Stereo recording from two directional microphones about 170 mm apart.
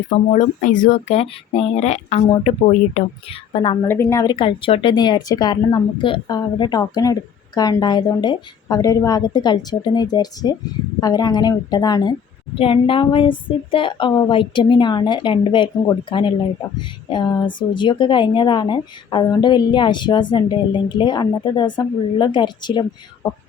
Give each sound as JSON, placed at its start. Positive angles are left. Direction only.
{"t": 0.1, "sound": "speech", "side_deg": 45}
{"t": 3.5, "sound": "a woman's voice", "side_deg": 30}
{"t": 3.8, "sound": "speech", "side_deg": 15}